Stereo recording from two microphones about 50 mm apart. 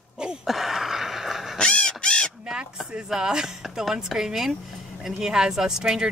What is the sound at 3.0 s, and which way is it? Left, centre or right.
Speech, centre.